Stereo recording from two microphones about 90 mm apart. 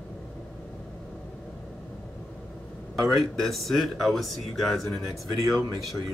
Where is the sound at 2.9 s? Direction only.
Centre (ahead or behind).